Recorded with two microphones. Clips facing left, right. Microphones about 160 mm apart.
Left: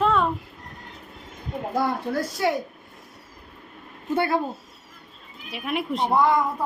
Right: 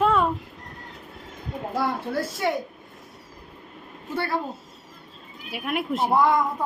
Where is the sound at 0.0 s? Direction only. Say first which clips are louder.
Right 1 dB; 5° right (ahead or behind).